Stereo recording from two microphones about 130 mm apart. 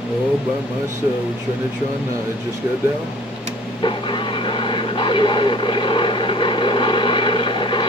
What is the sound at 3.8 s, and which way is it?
Vehicle, 40° left (ahead or behind).